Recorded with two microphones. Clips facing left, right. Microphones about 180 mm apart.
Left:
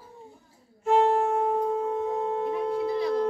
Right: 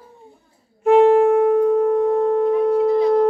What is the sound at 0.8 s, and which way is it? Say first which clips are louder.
Wind instrument: right 10 dB; 60° right (ahead or behind).